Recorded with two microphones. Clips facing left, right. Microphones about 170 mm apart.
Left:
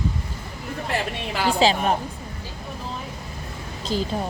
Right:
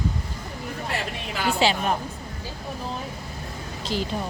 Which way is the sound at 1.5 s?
35° left (ahead or behind).